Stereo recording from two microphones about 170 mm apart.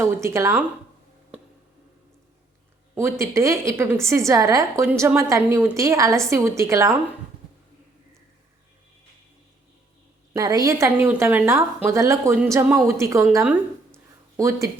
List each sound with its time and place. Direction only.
0.0 s a woman's voice: 15° right (ahead or behind)
2.9 s a woman's voice: 15° right (ahead or behind)
10.3 s a woman's voice: 20° right (ahead or behind)